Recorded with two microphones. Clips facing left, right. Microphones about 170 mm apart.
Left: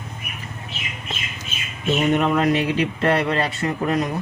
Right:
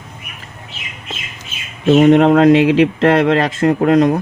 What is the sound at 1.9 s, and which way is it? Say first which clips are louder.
Speech: right 10 dB; 80° right.